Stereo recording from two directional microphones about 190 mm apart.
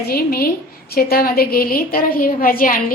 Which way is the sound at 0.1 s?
55° left (ahead or behind).